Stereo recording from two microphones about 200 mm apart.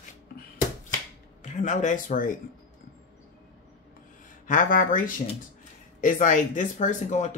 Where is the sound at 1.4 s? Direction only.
40° left (ahead or behind).